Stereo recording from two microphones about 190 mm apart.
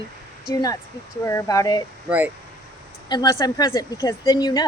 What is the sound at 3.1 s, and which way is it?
Speech, 20° left (ahead or behind).